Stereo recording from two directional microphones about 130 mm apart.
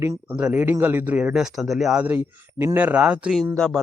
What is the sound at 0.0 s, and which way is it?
Speech, 20° right (ahead or behind).